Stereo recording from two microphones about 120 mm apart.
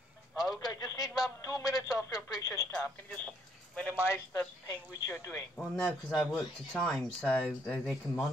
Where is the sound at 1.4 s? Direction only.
30° left (ahead or behind).